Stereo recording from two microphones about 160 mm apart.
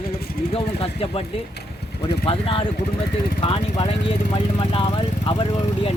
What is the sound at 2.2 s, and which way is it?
Speech, 35° left (ahead or behind).